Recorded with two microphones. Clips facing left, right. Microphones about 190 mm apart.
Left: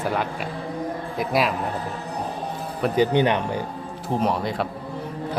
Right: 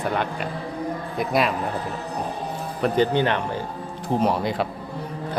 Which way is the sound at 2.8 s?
10° left (ahead or behind).